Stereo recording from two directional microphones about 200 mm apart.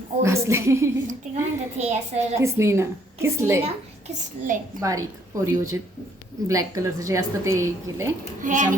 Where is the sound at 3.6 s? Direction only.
35° right (ahead or behind).